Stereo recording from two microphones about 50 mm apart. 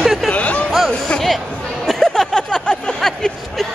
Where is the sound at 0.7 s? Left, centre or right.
Centre.